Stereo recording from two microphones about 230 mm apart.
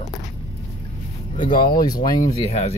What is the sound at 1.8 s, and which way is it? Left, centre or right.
Speech, centre.